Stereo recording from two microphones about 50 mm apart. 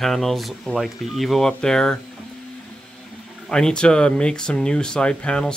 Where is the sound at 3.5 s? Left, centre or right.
Centre.